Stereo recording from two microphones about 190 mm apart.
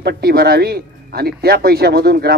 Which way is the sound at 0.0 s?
55° right (ahead or behind).